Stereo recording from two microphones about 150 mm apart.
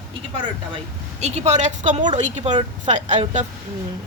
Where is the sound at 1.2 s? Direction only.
50° right (ahead or behind).